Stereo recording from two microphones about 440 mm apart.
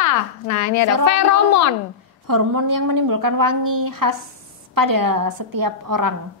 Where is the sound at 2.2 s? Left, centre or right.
Right.